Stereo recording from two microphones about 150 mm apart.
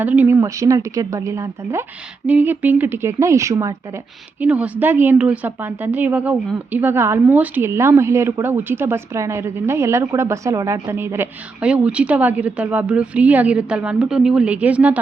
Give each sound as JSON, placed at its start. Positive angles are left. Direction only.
{"t": 0.0, "sound": "a woman's voice", "side_deg": -10}
{"t": 4.4, "sound": "a woman's voice", "side_deg": -10}